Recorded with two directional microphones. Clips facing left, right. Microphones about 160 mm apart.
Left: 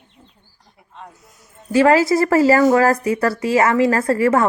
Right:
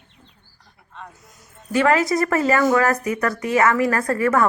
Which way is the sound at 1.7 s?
30° left (ahead or behind).